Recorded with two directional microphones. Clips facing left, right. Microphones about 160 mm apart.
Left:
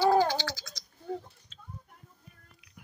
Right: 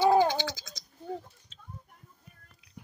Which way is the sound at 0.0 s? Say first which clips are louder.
Right 1 dB; 15° right (ahead or behind).